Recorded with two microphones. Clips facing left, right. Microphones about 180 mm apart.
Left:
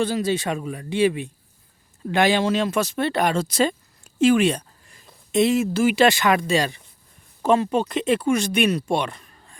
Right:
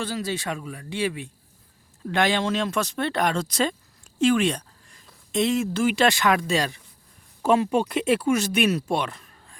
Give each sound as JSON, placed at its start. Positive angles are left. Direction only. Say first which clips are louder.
{"t": 0.0, "sound": "speech", "louder": "left 6 dB", "side_deg": 20}
{"t": 2.0, "sound": "speech", "louder": "left 4 dB", "side_deg": 5}